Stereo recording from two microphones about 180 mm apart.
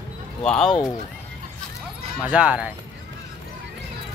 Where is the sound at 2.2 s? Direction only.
5° right (ahead or behind).